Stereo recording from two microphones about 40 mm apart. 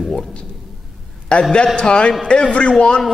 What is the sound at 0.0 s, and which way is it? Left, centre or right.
Speech, centre.